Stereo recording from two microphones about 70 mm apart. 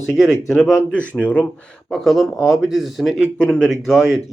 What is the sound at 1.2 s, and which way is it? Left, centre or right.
Speech, centre.